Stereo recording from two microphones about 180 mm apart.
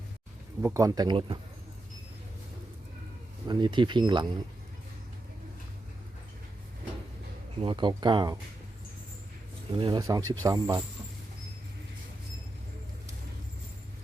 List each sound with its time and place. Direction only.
0.6 s speech: 20° right (ahead or behind)
3.4 s speech: 25° right (ahead or behind)
7.6 s speech: 25° right (ahead or behind)
9.7 s speech: 25° right (ahead or behind)